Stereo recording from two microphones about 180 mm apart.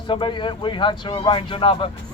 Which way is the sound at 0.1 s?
25° left (ahead or behind).